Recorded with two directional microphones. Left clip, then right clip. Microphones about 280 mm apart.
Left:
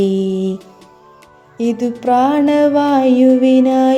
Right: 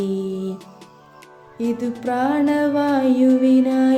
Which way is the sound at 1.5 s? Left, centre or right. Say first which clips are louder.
Left 6 dB; centre.